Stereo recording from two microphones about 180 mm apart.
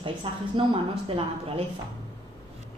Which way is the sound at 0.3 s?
30° right (ahead or behind).